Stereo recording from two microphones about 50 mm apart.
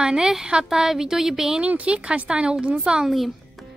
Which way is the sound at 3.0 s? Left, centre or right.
Centre.